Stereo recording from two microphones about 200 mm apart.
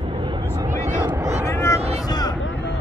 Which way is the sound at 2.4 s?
65° left (ahead or behind).